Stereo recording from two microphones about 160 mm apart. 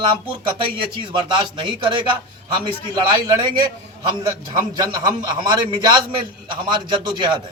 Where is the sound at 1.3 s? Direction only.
30° right (ahead or behind).